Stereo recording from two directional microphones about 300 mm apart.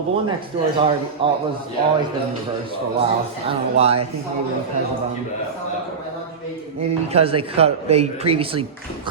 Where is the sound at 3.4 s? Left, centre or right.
Centre.